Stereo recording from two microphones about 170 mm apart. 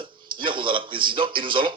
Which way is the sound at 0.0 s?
30° right (ahead or behind).